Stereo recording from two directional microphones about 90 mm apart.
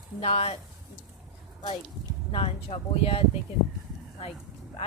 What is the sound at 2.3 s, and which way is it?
Speech, 90° left.